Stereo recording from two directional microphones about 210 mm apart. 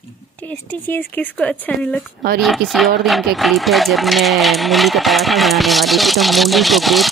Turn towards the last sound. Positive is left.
turn(degrees=0)  # may be behind; listen again after turning